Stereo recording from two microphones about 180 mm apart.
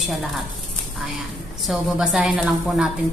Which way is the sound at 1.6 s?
Centre (ahead or behind).